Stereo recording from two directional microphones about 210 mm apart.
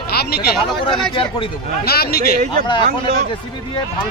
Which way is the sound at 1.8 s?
50° left (ahead or behind).